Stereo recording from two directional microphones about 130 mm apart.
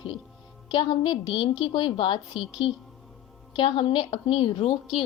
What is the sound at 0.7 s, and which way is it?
A woman's voice, 40° left (ahead or behind).